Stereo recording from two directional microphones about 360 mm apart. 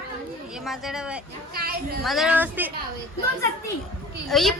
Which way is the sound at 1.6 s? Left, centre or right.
Right.